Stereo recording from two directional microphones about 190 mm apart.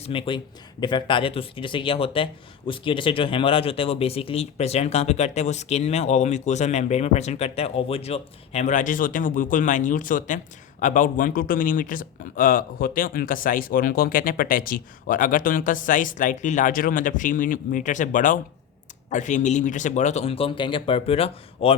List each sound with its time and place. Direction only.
0.0 s speech: 30° left (ahead or behind)